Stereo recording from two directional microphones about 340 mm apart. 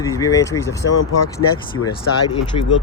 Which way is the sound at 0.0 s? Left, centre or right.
Centre.